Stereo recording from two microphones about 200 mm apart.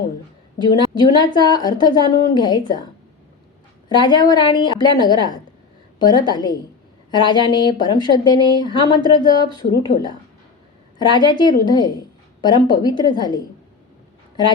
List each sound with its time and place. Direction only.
0.6 s a woman's voice: 20° left (ahead or behind)
3.8 s a woman's voice: 20° left (ahead or behind)